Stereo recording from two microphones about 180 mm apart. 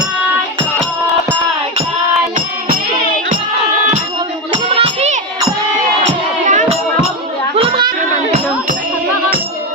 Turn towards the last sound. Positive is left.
turn(degrees=-30)  # may be behind; listen again after turning